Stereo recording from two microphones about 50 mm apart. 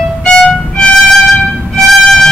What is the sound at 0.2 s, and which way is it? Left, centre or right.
Violin, centre.